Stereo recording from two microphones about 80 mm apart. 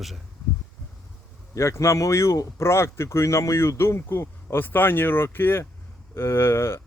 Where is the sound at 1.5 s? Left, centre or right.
Left.